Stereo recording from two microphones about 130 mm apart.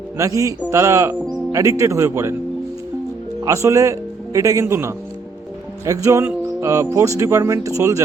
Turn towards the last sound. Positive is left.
turn(degrees=-25)  # may be behind; listen again after turning